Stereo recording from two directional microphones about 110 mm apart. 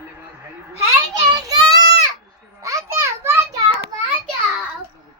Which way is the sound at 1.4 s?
35° right (ahead or behind).